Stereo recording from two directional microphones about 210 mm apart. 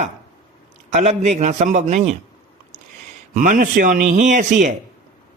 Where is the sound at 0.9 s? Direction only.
35° right (ahead or behind).